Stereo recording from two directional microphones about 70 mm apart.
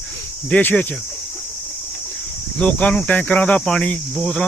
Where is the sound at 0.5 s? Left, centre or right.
Left.